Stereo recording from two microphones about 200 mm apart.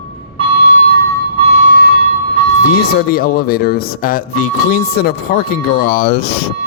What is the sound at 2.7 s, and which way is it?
Speech, 50° left (ahead or behind).